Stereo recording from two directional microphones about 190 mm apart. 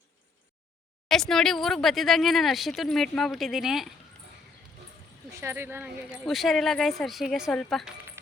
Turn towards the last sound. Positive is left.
turn(degrees=0)  # may be behind; listen again after turning